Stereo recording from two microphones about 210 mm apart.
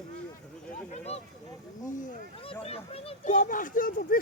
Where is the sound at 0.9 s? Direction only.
30° left (ahead or behind).